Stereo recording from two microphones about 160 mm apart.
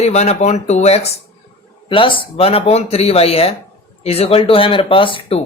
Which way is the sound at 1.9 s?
30° left (ahead or behind).